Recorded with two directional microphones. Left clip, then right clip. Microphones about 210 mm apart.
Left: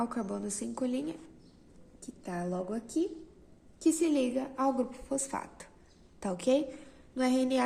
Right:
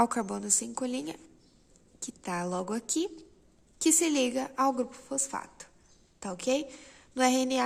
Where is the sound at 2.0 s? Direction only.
40° right (ahead or behind).